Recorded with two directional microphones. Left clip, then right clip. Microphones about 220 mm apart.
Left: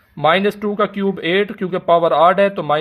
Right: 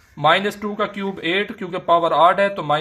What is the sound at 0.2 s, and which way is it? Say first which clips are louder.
Speech: left 2 dB; 45° left (ahead or behind).